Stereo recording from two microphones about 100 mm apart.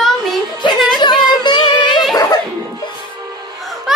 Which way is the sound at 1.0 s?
50° left (ahead or behind).